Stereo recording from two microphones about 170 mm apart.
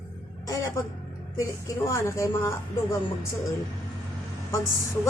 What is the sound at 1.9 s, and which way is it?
A woman's voice, 20° left (ahead or behind).